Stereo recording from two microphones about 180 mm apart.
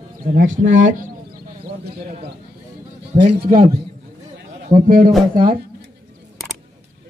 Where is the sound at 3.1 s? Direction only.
35° right (ahead or behind).